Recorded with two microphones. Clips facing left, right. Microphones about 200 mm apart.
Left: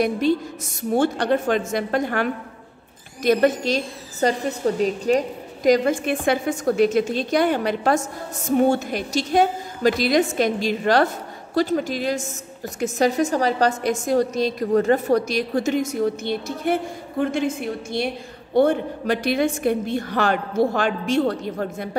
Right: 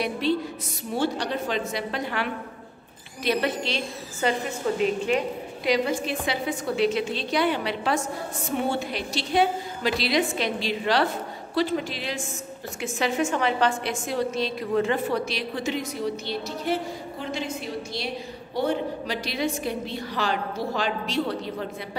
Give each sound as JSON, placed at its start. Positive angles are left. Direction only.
{"t": 0.0, "sound": "a woman's voice", "side_deg": 45}